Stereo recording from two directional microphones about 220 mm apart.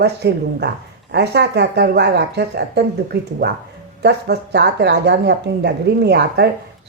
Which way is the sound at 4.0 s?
50° right (ahead or behind).